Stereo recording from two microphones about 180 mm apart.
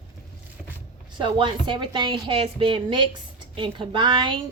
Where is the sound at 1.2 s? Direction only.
25° right (ahead or behind).